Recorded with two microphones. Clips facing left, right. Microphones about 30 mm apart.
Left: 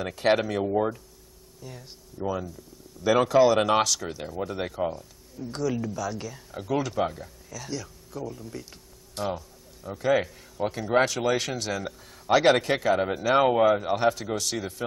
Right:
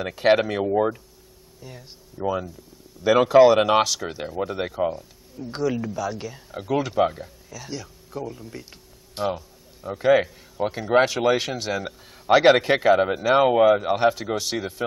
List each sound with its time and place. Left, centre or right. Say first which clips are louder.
0.0 s a man's voice: right 4 dB; centre